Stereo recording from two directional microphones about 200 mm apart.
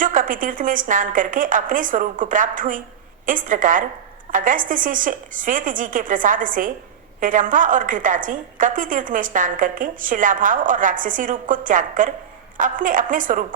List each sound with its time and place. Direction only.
0.0 s a woman's voice: 40° right (ahead or behind)